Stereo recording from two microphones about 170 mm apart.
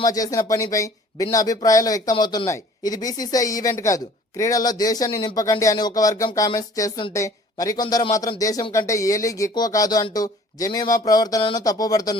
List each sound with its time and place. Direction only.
0.0 s speech: 20° left (ahead or behind)